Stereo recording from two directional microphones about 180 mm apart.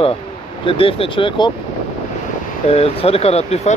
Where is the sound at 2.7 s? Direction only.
35° left (ahead or behind).